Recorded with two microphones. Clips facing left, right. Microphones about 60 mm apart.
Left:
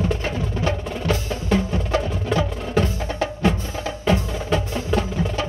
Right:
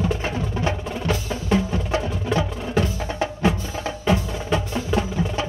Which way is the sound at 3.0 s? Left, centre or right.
Right.